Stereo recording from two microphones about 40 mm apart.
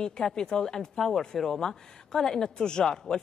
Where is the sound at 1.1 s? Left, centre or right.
Centre.